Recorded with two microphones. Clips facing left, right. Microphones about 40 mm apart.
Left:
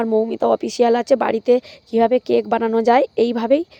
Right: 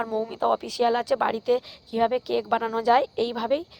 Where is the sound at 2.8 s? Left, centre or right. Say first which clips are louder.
Left 6 dB; left.